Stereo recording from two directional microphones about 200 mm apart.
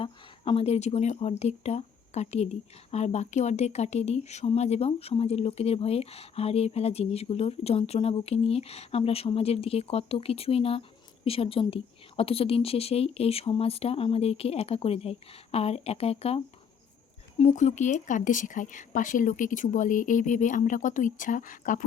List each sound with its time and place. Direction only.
0.0 s a woman's voice: 25° left (ahead or behind)